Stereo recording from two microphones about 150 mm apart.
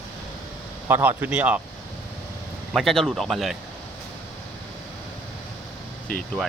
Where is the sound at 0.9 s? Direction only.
15° right (ahead or behind).